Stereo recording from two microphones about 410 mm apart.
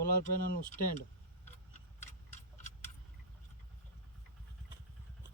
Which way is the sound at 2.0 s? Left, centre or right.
Centre.